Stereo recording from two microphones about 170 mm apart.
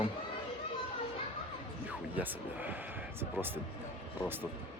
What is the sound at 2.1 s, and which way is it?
Speech, 10° right (ahead or behind).